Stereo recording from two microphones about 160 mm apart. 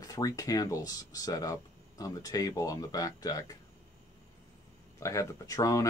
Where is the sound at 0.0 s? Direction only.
20° left (ahead or behind).